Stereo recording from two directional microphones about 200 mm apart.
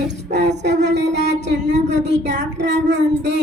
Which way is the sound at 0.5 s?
60° right (ahead or behind).